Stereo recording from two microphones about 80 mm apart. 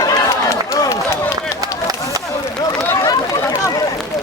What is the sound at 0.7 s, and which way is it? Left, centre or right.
Run, left.